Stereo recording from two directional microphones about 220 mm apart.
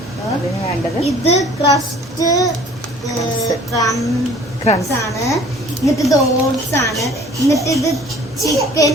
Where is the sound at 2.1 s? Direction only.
15° left (ahead or behind).